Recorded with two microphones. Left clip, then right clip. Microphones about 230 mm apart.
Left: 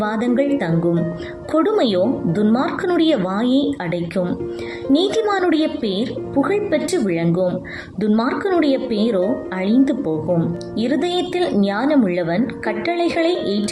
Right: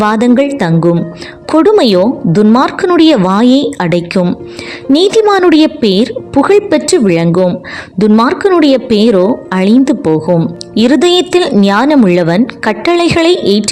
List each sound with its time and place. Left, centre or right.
0.0 s a woman's voice: right